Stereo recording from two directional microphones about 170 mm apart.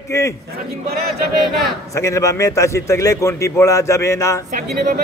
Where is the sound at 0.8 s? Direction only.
65° right (ahead or behind).